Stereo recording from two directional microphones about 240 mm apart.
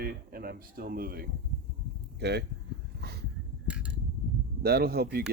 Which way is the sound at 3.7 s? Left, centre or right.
Centre.